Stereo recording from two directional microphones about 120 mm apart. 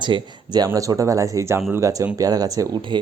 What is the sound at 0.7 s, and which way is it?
Speech, 25° right (ahead or behind).